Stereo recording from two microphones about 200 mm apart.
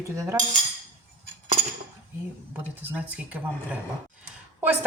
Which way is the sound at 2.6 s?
10° right (ahead or behind).